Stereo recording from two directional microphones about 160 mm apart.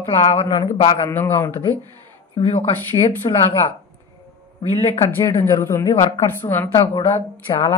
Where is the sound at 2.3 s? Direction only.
40° left (ahead or behind).